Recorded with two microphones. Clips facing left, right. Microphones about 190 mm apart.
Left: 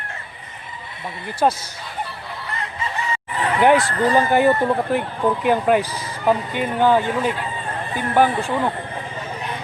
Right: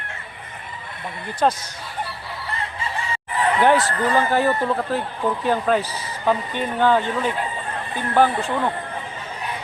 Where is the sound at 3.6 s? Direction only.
15° left (ahead or behind).